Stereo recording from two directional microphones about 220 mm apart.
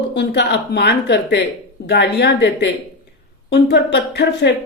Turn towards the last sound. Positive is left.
turn(degrees=50)  # may be behind; listen again after turning